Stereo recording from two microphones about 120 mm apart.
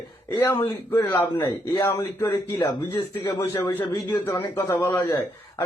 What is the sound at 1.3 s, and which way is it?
Speech, 40° left (ahead or behind).